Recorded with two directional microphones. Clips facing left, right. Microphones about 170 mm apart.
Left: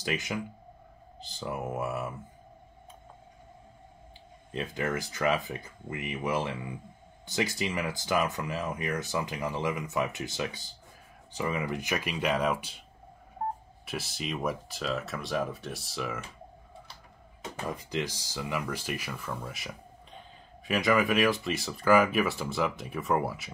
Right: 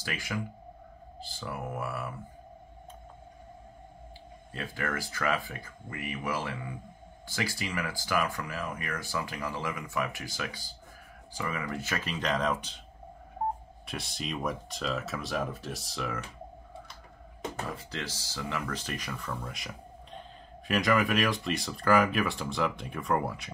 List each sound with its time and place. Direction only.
0.0 s speech: 20° left (ahead or behind)
4.5 s speech: 20° left (ahead or behind)
13.8 s speech: 5° left (ahead or behind)
17.6 s speech: 15° left (ahead or behind)